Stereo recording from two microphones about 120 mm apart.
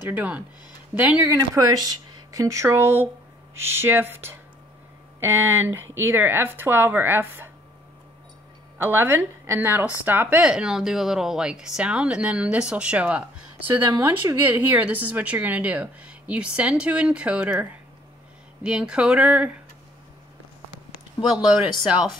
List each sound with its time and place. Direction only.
0.0 s a woman's voice: 15° right (ahead or behind)
1.3 s a woman's voice: 30° right (ahead or behind)
8.7 s a woman's voice: 15° right (ahead or behind)
13.7 s a woman's voice: 20° right (ahead or behind)